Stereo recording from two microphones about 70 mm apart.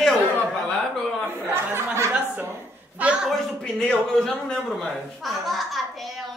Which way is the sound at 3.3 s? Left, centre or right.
Centre.